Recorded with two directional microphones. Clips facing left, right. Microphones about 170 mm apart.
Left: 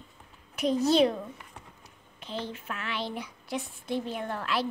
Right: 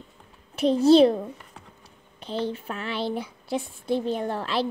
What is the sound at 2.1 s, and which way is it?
A child's voice, 30° right (ahead or behind).